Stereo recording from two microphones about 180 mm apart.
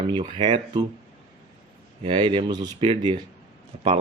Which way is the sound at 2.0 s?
25° right (ahead or behind).